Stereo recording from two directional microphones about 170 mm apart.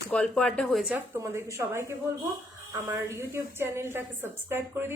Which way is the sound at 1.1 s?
15° right (ahead or behind).